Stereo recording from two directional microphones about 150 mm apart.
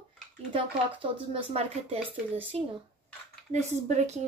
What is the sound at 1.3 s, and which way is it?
A woman's voice, 40° right (ahead or behind).